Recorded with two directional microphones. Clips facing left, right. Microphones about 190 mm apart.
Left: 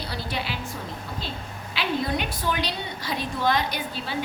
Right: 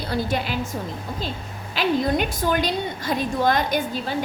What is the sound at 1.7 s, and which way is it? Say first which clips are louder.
A woman's voice: right 6 dB; 45° right (ahead or behind).